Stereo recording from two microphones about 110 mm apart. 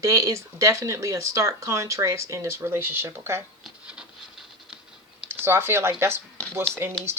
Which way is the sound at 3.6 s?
10° right (ahead or behind).